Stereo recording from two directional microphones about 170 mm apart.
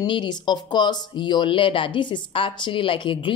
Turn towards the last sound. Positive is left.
turn(degrees=30)  # may be behind; listen again after turning